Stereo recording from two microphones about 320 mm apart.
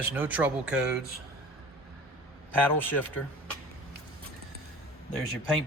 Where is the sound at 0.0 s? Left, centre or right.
Centre.